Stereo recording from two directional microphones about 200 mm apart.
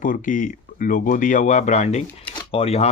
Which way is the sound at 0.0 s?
40° left (ahead or behind).